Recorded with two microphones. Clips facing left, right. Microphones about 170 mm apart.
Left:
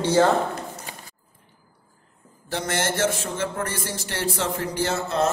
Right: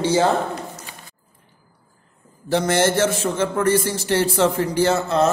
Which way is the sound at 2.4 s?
90° right.